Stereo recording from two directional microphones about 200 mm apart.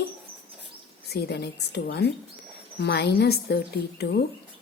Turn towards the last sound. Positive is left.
turn(degrees=55)  # may be behind; listen again after turning